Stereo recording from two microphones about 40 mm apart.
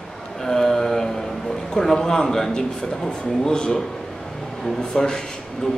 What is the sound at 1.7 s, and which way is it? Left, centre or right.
A man's voice, centre.